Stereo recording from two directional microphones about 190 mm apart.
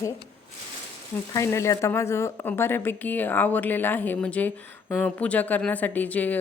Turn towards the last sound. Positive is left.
turn(degrees=10)  # may be behind; listen again after turning